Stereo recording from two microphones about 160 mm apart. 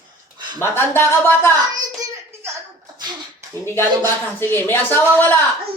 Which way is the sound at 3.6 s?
15° left (ahead or behind).